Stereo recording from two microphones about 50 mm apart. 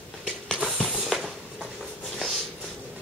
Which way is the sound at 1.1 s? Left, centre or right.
Centre.